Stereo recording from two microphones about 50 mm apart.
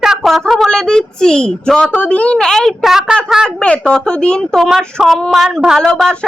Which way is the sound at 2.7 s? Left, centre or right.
Centre.